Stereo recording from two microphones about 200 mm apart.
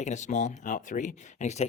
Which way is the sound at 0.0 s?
35° left (ahead or behind).